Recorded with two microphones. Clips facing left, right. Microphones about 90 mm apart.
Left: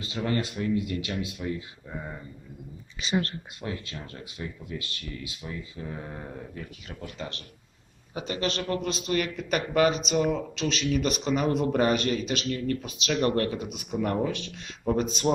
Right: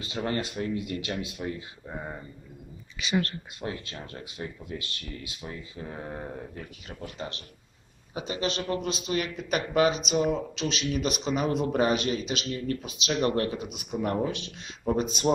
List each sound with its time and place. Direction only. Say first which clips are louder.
0.1 s speech: left 1 dB; 30° right (ahead or behind)
3.0 s speech: even; 30° left (ahead or behind)
3.6 s speech: even; 30° right (ahead or behind); by 15.3 s 10° right (ahead or behind)